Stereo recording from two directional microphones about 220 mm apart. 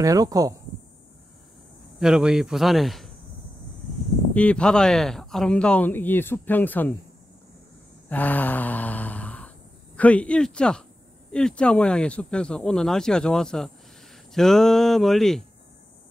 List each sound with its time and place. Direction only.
0.0 s speech: 15° right (ahead or behind)
2.0 s speech: 5° right (ahead or behind)
4.3 s speech: 5° left (ahead or behind)
8.1 s mantra: 5° left (ahead or behind)
9.9 s speech: 5° left (ahead or behind)